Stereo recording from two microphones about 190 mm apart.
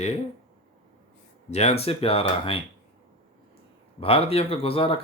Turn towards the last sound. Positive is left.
turn(degrees=30)  # may be behind; listen again after turning